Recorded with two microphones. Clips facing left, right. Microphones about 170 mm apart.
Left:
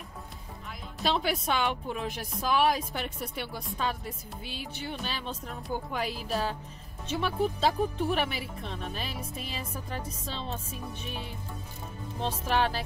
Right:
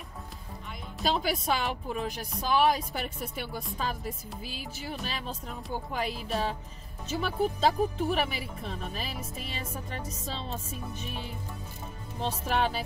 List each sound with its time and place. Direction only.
1.0 s speech: centre (ahead or behind)